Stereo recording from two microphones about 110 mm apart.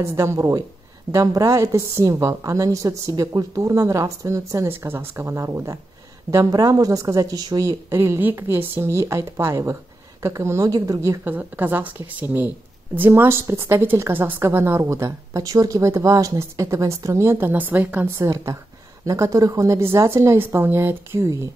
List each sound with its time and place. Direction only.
0.0 s a woman's voice: 25° right (ahead or behind)
7.9 s a woman's voice: 20° right (ahead or behind)
11.2 s a woman's voice: 15° right (ahead or behind)